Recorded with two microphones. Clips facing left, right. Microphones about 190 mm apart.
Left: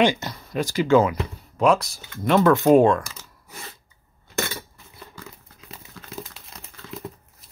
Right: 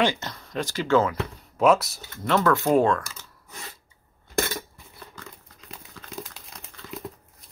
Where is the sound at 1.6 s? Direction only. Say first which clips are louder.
Even; 5° right (ahead or behind).